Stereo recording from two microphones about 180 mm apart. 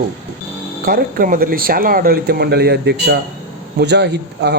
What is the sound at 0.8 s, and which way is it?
A man's voice, 55° right (ahead or behind).